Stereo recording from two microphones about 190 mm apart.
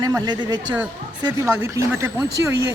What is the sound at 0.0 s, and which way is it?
Speech, 20° right (ahead or behind).